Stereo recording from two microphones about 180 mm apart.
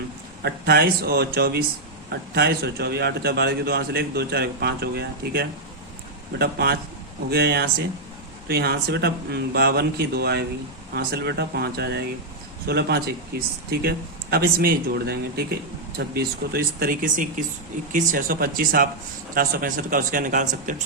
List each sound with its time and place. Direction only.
0.4 s a man's voice: 65° right (ahead or behind); by 20.8 s 45° right (ahead or behind)